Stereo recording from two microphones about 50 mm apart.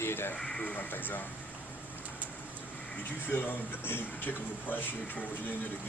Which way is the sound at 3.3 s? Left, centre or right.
Left.